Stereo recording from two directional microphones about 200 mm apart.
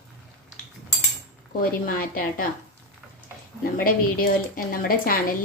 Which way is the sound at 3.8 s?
45° left (ahead or behind).